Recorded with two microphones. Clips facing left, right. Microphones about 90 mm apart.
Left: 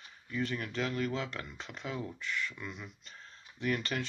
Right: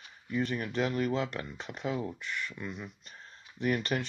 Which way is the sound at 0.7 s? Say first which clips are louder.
Right 5 dB; 10° right (ahead or behind).